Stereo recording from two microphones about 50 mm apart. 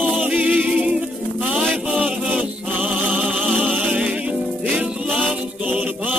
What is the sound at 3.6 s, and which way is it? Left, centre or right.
Music, right.